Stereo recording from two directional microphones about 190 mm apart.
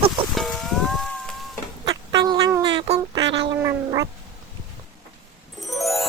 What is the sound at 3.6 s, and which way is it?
Cat, 15° right (ahead or behind).